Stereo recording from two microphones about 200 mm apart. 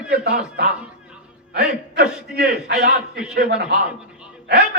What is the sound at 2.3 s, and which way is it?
Speech, 55° right (ahead or behind).